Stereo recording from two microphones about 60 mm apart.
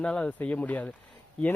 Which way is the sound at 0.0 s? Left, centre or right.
Centre.